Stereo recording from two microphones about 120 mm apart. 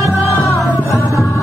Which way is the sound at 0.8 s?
25° left (ahead or behind).